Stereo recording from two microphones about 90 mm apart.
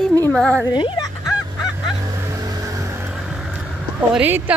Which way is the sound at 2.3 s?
40° right (ahead or behind).